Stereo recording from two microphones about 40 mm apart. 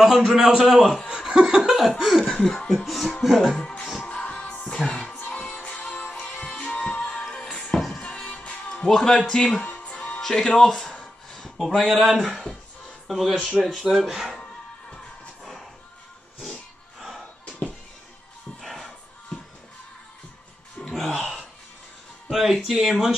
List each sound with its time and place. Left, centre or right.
0.3 s speech: centre
1.1 s laughter: centre
2.4 s speech: centre
2.7 s speech: centre
3.5 s speech: left
4.0 s music: left
5.2 s music: left
8.8 s speech: centre
9.7 s music: left
10.2 s speech: centre
11.5 s speech: centre
18.6 s music: centre
20.9 s a sound: centre
22.3 s speech: centre